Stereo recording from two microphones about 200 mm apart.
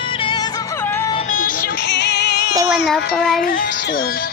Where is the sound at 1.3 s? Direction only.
45° left (ahead or behind); by 2.5 s 60° left (ahead or behind).